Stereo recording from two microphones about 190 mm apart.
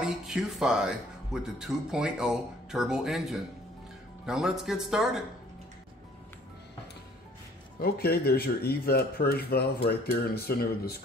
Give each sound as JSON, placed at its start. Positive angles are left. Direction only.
{"t": 0.0, "sound": "speech", "side_deg": -5}
{"t": 7.8, "sound": "speech", "side_deg": 55}